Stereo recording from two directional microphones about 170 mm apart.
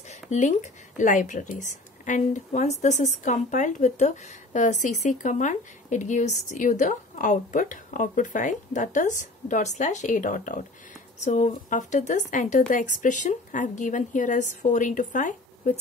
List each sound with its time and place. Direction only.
0.1 s speech: 45° left (ahead or behind)